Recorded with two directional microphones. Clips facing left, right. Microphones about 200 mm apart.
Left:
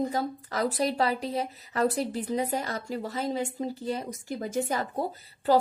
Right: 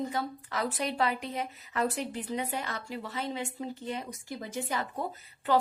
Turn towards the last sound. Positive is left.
turn(degrees=35)  # may be behind; listen again after turning